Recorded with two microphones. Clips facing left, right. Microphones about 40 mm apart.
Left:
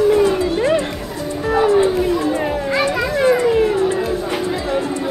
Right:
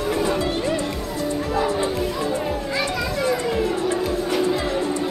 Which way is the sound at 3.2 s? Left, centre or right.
Left.